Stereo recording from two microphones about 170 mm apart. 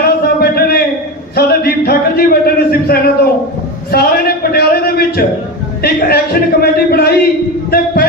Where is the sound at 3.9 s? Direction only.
65° left (ahead or behind).